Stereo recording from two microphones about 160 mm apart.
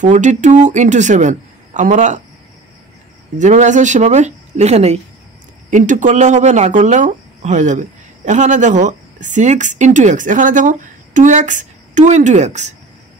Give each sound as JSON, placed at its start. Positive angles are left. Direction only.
{"t": 0.0, "sound": "speech", "side_deg": -50}
{"t": 3.3, "sound": "speech", "side_deg": -50}